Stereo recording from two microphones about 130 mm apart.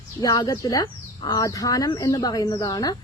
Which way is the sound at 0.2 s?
30° left (ahead or behind).